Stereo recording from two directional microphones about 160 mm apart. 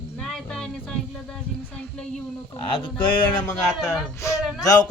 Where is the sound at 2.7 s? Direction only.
30° left (ahead or behind).